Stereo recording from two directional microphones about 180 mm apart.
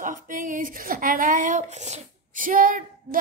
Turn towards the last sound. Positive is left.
turn(degrees=-50)  # may be behind; listen again after turning